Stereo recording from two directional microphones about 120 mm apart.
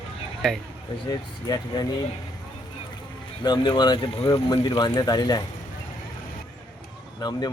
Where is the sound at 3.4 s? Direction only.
40° left (ahead or behind).